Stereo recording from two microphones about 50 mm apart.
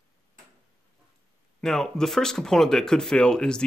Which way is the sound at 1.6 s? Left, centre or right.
Centre.